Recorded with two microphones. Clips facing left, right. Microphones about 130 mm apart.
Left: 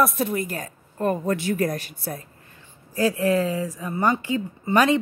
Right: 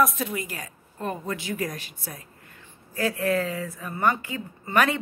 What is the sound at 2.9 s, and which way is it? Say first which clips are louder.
A woman's voice: left 4 dB; 30° left (ahead or behind).